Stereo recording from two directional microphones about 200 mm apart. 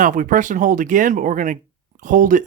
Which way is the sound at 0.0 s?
40° right (ahead or behind).